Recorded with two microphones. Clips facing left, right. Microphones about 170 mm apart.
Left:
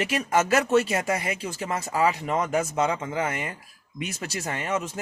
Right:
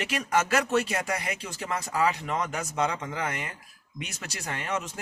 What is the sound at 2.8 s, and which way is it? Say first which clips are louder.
Speech: left 4 dB; 5° left (ahead or behind).